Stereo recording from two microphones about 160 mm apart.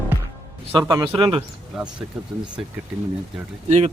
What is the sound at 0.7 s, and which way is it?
Speech, 25° right (ahead or behind).